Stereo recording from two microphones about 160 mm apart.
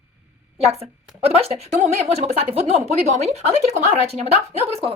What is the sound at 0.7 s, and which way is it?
A woman's voice, 40° right (ahead or behind).